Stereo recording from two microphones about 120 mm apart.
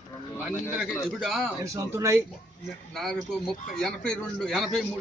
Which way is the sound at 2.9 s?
5° left (ahead or behind).